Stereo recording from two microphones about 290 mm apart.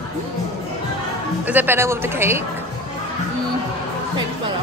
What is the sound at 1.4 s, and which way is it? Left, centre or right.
Speech, centre.